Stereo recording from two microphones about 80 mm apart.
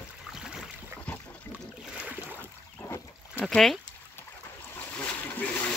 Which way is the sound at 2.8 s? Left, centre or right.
Left.